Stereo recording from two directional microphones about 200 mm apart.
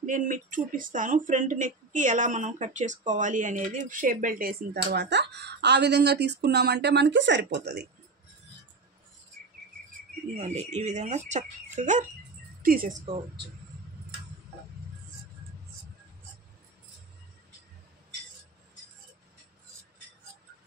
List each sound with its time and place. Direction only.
0.0 s speech: 40° right (ahead or behind)
10.3 s a woman's voice: 35° right (ahead or behind)
13.0 s speech: 30° right (ahead or behind)